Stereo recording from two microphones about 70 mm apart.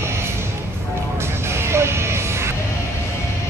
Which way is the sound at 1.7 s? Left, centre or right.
Right.